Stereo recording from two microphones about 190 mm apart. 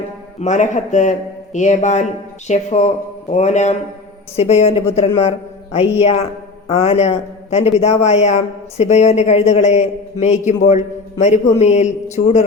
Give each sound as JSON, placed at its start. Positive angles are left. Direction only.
{"t": 0.3, "sound": "a man's voice", "side_deg": 40}